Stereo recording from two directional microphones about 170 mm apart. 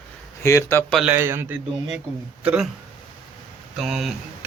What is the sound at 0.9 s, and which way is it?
Speech, centre (ahead or behind).